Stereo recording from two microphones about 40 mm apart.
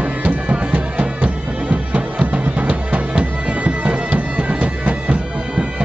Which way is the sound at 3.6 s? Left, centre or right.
Right.